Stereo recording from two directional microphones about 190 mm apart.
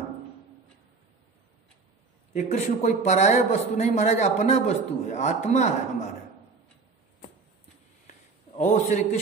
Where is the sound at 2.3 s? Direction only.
35° left (ahead or behind).